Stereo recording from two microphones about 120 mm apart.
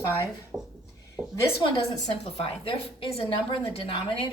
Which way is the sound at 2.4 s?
50° left (ahead or behind).